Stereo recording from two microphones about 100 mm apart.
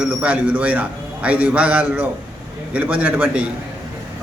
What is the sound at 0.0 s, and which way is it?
A man's voice, 10° right (ahead or behind).